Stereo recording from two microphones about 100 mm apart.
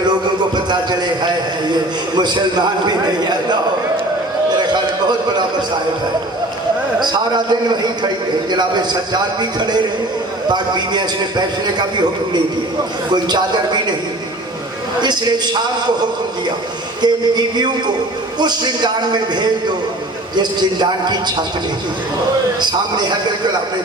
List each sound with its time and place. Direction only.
0.1 s a sound: 45° right (ahead or behind)
1.7 s a man's voice: 45° right (ahead or behind)
4.6 s a sound: 45° right (ahead or behind)
7.0 s a man's voice: 45° right (ahead or behind)
13.2 s a man's voice: 45° right (ahead or behind)
15.0 s a man's voice: 45° right (ahead or behind)
17.0 s a man's voice: 45° right (ahead or behind)
22.6 s a man's voice: 45° right (ahead or behind)